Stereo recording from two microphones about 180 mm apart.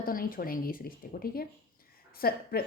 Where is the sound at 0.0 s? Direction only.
55° left (ahead or behind).